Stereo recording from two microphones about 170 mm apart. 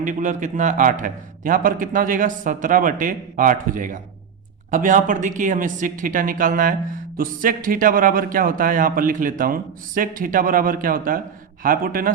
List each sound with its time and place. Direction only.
0.0 s a man's voice: 50° right (ahead or behind)